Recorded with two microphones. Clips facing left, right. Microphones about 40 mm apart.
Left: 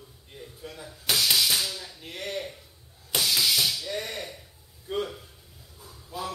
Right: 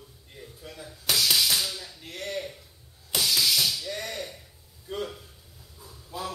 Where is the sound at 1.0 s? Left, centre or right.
Centre.